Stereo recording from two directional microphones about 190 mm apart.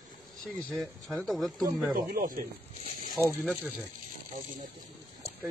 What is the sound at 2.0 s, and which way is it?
Speech, 45° right (ahead or behind).